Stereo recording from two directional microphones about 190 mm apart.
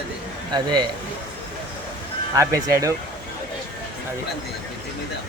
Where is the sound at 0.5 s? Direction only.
20° right (ahead or behind).